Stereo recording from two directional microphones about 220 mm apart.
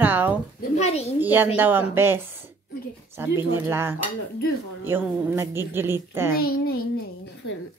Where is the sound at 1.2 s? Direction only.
10° right (ahead or behind).